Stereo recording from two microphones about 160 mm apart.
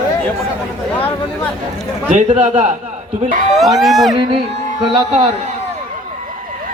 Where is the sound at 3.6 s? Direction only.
Centre (ahead or behind).